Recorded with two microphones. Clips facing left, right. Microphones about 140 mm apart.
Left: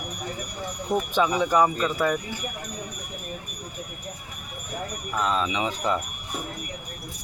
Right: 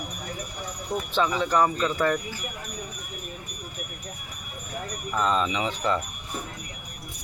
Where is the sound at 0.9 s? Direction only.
15° left (ahead or behind).